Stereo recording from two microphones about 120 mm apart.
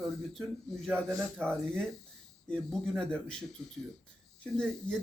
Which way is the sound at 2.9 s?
5° left (ahead or behind).